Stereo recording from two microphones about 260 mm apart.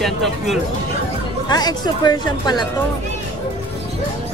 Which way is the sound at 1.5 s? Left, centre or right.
Centre.